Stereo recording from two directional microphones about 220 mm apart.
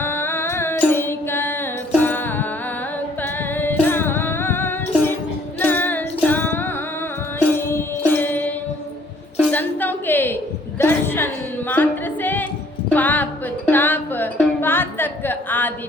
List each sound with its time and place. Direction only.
0.0 s music: 10° left (ahead or behind)
9.5 s a sound: 10° left (ahead or behind)
11.7 s music: 10° left (ahead or behind)